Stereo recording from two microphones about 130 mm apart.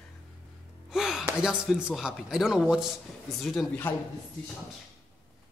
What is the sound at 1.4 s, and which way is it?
A man's voice, 5° right (ahead or behind).